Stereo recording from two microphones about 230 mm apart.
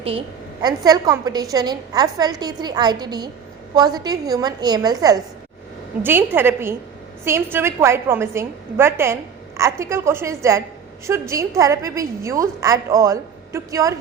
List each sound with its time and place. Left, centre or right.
0.6 s a woman's voice: centre